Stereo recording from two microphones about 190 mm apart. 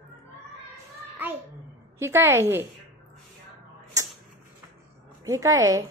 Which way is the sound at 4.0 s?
20° right (ahead or behind).